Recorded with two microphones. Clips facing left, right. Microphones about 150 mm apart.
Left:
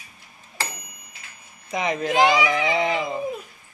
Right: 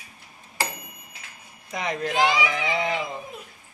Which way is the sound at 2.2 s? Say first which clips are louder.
Left 4 dB; 45° left (ahead or behind).